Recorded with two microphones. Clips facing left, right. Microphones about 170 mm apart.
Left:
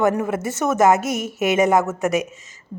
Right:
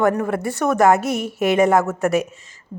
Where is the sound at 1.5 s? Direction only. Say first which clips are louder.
Right 1 dB; 20° left (ahead or behind).